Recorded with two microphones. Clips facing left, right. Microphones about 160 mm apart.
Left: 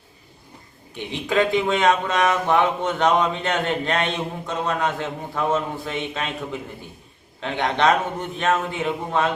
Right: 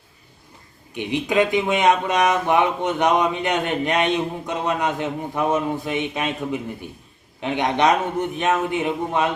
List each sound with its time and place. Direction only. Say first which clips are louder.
0.9 s speech: right 2 dB; 15° right (ahead or behind)